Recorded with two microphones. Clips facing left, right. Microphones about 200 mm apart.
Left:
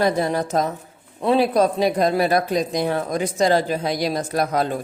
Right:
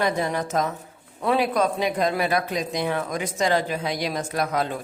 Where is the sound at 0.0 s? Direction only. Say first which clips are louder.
Left 4 dB; 35° left (ahead or behind).